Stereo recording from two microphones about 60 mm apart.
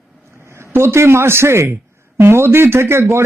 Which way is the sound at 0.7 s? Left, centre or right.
Right.